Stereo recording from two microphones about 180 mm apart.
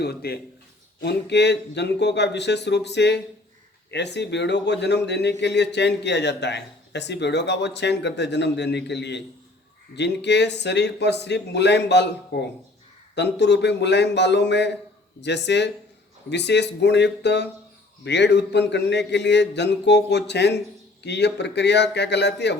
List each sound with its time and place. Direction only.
0.0 s a man's voice: 60° left (ahead or behind)